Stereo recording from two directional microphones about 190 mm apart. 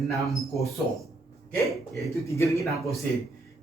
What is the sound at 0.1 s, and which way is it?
Speech, centre (ahead or behind).